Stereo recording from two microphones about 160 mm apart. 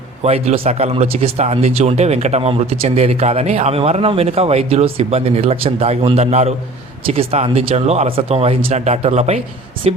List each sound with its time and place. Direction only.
0.2 s speech: 40° right (ahead or behind)